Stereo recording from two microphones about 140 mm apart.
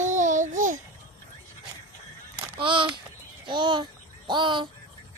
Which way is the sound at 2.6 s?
35° right (ahead or behind).